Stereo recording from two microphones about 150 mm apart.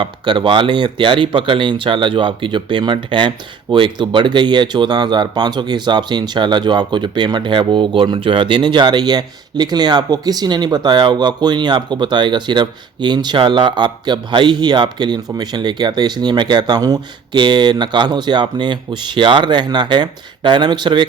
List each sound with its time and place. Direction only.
0.0 s speech: 35° right (ahead or behind)